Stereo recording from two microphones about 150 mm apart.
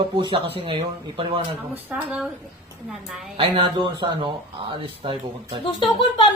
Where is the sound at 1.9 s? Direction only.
5° right (ahead or behind).